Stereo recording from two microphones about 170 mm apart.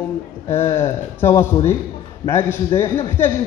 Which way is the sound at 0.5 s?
35° left (ahead or behind).